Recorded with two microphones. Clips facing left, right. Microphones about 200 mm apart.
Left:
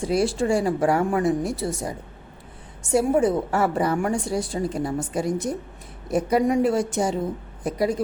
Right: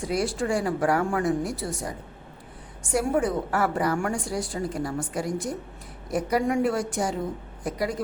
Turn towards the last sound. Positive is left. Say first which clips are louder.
# left 5 dB
turn(degrees=25)  # may be behind; listen again after turning